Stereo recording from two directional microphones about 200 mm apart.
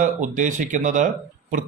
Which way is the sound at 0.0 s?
40° right (ahead or behind).